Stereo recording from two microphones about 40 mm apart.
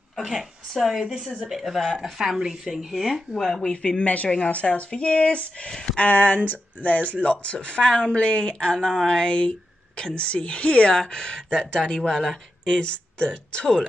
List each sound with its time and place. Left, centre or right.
0.1 s a sound: centre
0.8 s speech: centre
3.7 s a woman's voice: left
5.7 s a woman's voice: centre
5.9 s a woman's voice: left; by 13.8 s centre